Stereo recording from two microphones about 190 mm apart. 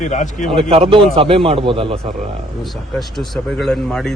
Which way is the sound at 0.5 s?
30° right (ahead or behind).